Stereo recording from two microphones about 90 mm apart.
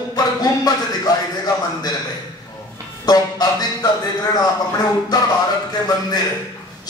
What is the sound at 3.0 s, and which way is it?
A man's voice, 45° left (ahead or behind).